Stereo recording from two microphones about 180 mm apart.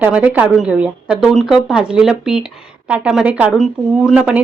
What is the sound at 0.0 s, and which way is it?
A woman's voice, 10° right (ahead or behind).